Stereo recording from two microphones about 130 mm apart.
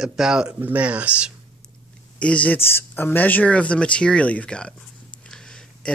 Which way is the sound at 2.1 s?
10° left (ahead or behind).